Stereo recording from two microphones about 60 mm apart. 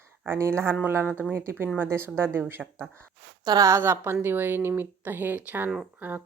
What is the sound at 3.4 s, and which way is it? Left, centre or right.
Speech, right.